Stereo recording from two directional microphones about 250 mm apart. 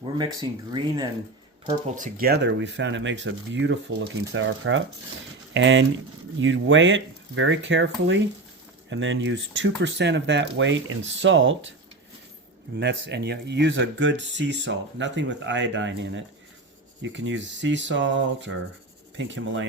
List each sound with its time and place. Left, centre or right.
0.2 s speech: centre
2.0 s speech: right
12.7 s speech: right